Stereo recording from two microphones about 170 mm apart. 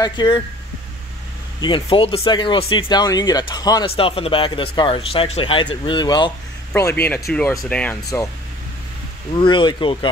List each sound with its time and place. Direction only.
0.0 s speech: 25° left (ahead or behind)
1.6 s speech: 30° left (ahead or behind)
3.9 s speech: 35° left (ahead or behind)
6.7 s speech: 15° left (ahead or behind)
9.3 s speech: 30° left (ahead or behind)